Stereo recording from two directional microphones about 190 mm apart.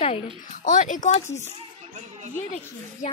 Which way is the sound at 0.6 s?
40° left (ahead or behind).